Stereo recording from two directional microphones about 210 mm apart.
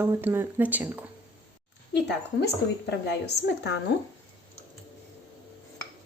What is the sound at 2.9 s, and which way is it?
Speech, 55° left (ahead or behind).